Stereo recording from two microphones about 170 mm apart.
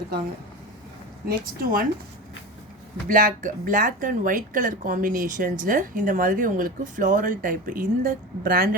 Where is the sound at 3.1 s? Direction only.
50° right (ahead or behind).